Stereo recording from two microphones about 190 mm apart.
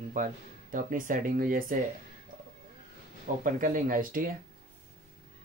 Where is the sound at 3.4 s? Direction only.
45° right (ahead or behind).